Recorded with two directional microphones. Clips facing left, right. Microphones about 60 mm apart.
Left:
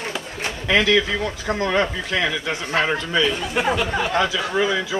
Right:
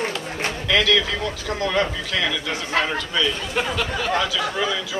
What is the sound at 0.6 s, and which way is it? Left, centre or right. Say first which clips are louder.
A man's voice: left 2 dB; left.